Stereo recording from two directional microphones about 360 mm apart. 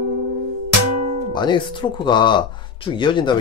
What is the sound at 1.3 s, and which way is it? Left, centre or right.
Speech, centre.